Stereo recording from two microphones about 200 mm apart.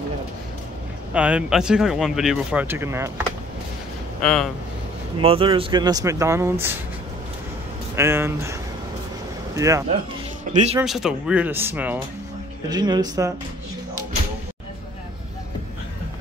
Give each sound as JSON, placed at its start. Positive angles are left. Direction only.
{"t": 1.1, "sound": "speech", "side_deg": -5}
{"t": 4.2, "sound": "speech", "side_deg": 5}
{"t": 5.2, "sound": "speech", "side_deg": -25}
{"t": 7.9, "sound": "speech", "side_deg": -10}
{"t": 9.6, "sound": "speech", "side_deg": -15}
{"t": 10.5, "sound": "speech", "side_deg": -35}
{"t": 10.8, "sound": "speech", "side_deg": -5}
{"t": 12.6, "sound": "speech", "side_deg": -20}